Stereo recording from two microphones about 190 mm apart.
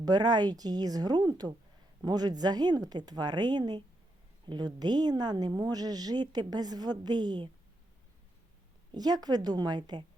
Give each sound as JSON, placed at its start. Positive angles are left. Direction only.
{"t": 0.0, "sound": "a woman's voice", "side_deg": -20}
{"t": 8.9, "sound": "a woman's voice", "side_deg": -20}